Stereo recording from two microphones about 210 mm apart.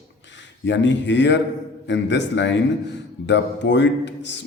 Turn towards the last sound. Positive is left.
turn(degrees=55)  # may be behind; listen again after turning